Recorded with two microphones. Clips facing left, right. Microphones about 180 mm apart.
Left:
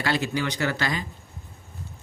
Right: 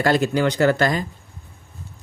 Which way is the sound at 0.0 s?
50° right (ahead or behind).